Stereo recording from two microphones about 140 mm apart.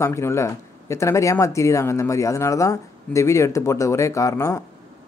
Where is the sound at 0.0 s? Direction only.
20° left (ahead or behind).